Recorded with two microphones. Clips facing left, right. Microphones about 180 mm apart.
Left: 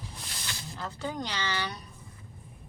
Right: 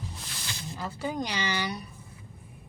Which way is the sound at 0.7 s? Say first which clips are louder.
Right 3 dB; 10° right (ahead or behind).